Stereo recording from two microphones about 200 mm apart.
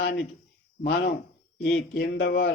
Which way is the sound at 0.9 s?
50° left (ahead or behind).